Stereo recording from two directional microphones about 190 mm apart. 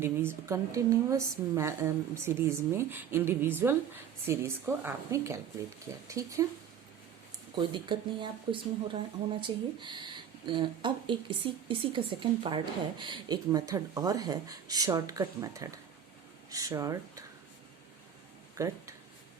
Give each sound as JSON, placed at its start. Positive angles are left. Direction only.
{"t": 0.0, "sound": "a woman's voice", "side_deg": -15}
{"t": 7.5, "sound": "speech", "side_deg": -25}
{"t": 18.5, "sound": "a sound", "side_deg": -15}